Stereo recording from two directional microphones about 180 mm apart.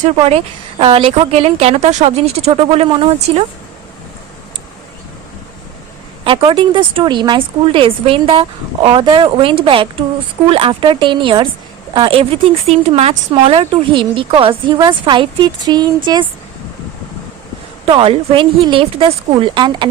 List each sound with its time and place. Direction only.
0.0 s a woman's voice: 35° right (ahead or behind)
6.2 s speech: 30° right (ahead or behind)
17.8 s speech: 30° right (ahead or behind)